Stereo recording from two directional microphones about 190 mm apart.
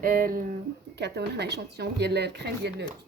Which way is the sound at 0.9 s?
60° right (ahead or behind).